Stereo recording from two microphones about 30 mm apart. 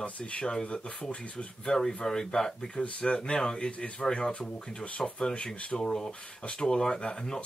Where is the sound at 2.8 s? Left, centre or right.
Left.